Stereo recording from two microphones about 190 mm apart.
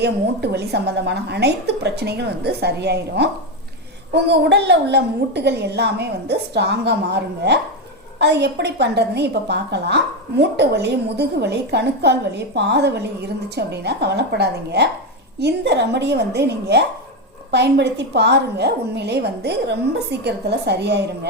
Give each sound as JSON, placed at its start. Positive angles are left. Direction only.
{"t": 0.0, "sound": "a woman's voice", "side_deg": -60}